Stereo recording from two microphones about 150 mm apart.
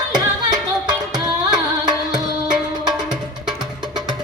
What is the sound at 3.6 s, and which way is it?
Music, 30° right (ahead or behind).